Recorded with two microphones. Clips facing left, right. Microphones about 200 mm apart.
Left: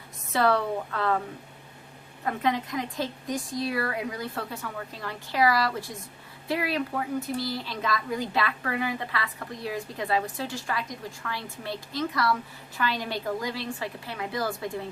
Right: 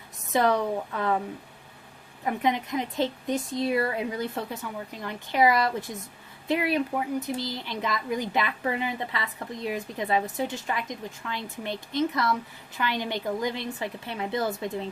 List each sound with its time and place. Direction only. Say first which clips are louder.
0.3 s speech: right 1 dB; 15° right (ahead or behind)
2.2 s a woman's voice: right 1 dB; 20° right (ahead or behind)